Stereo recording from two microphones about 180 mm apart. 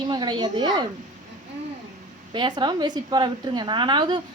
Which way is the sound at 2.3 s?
25° right (ahead or behind).